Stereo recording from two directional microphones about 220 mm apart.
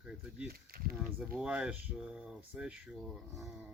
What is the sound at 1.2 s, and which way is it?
Speech, 5° right (ahead or behind).